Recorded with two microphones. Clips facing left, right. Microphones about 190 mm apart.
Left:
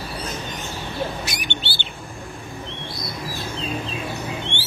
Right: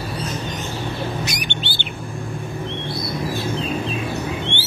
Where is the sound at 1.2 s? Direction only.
20° right (ahead or behind).